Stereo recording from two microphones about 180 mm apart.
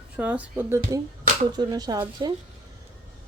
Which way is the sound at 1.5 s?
20° right (ahead or behind).